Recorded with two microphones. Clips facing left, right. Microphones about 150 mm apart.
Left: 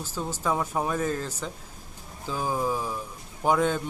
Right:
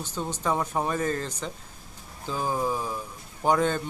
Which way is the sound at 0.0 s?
5° left (ahead or behind).